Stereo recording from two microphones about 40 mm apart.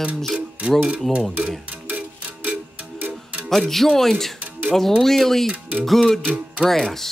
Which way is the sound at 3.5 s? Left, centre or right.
Centre.